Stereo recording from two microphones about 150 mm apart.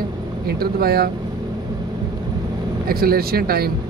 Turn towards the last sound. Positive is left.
turn(degrees=-90)